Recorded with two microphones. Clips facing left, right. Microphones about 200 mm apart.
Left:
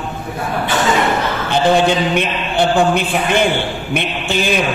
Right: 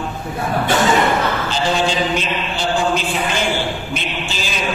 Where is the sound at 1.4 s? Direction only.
60° left (ahead or behind).